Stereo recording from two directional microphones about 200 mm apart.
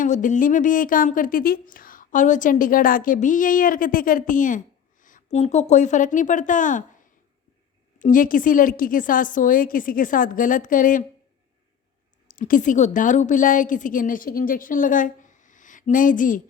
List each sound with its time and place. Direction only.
0.0 s a woman's voice: 40° left (ahead or behind)
7.9 s a woman's voice: 40° left (ahead or behind)
12.3 s a woman's voice: 45° left (ahead or behind)